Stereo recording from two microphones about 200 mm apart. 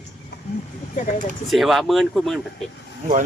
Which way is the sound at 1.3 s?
Centre (ahead or behind).